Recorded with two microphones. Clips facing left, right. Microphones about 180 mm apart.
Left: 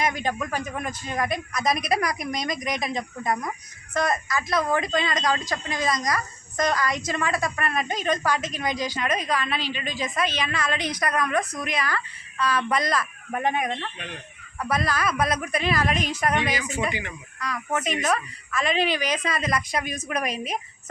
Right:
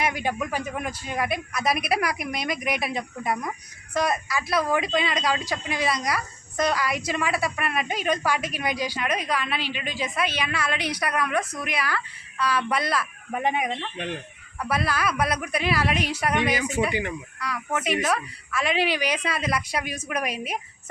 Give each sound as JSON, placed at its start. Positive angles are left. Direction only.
{"t": 0.0, "sound": "a woman's voice", "side_deg": -10}
{"t": 16.5, "sound": "speech", "side_deg": -55}
{"t": 17.7, "sound": "a woman's voice", "side_deg": -10}